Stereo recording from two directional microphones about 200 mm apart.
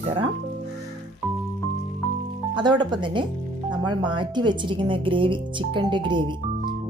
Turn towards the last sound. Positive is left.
turn(degrees=-25)  # may be behind; listen again after turning